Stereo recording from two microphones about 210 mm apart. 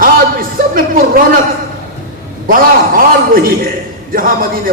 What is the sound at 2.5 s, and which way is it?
A man's voice, 40° right (ahead or behind).